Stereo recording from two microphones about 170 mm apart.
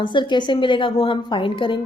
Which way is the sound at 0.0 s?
30° left (ahead or behind).